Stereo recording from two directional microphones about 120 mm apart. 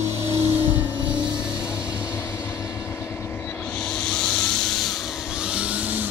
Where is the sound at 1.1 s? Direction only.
10° right (ahead or behind).